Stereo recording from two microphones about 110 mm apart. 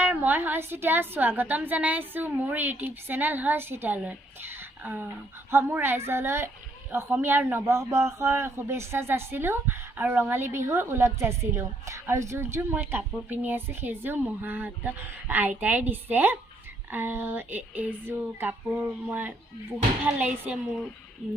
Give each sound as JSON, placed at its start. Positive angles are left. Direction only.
{"t": 0.0, "sound": "a woman's voice", "side_deg": -15}